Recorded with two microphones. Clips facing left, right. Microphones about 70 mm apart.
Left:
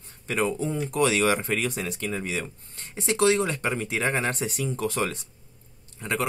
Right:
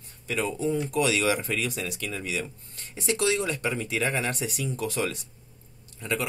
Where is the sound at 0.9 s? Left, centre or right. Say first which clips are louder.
Left 5 dB; left.